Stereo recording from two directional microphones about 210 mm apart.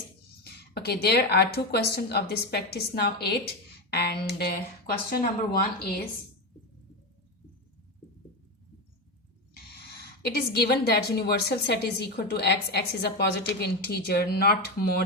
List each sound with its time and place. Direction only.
0.4 s a woman's voice: 50° left (ahead or behind)
10.0 s a woman's voice: 50° left (ahead or behind)